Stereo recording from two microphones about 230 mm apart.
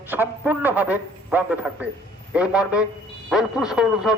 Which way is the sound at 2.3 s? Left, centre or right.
Centre.